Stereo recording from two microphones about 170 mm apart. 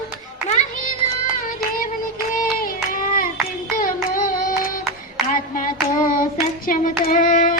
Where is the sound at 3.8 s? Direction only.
55° left (ahead or behind).